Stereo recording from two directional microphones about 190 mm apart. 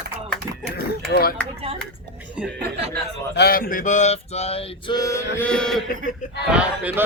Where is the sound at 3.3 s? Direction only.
55° left (ahead or behind); by 4.9 s 30° left (ahead or behind).